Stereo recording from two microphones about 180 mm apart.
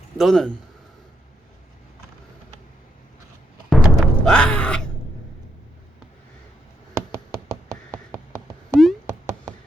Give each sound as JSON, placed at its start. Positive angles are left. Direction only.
{"t": 0.2, "sound": "speech", "side_deg": 0}
{"t": 3.7, "sound": "music", "side_deg": 0}
{"t": 7.9, "sound": "a sound", "side_deg": -15}
{"t": 8.7, "sound": "music", "side_deg": 0}